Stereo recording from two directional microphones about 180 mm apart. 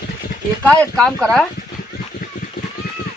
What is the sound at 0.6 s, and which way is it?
Speech, 5° left (ahead or behind).